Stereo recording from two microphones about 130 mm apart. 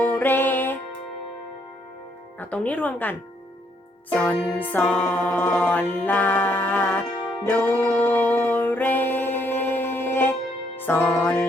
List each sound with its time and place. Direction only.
0.0 s music: 15° left (ahead or behind)
2.4 s music: 10° left (ahead or behind)